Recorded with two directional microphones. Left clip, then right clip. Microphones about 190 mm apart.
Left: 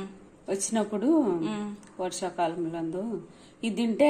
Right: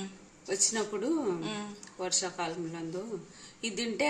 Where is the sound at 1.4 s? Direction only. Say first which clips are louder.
Left 5 dB; centre (ahead or behind).